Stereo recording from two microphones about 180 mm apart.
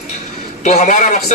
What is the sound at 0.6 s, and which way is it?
Speech, 40° left (ahead or behind).